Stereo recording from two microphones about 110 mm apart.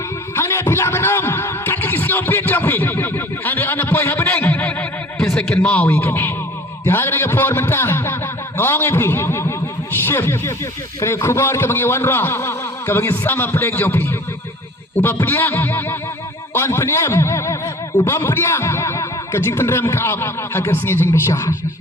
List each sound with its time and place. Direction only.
0.3 s speech: 25° left (ahead or behind)